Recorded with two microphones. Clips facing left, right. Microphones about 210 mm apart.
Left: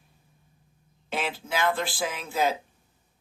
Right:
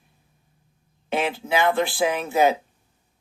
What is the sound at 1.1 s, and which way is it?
Speech, 60° right (ahead or behind).